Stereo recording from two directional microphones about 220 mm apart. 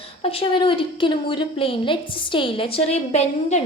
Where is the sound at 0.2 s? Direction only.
25° left (ahead or behind).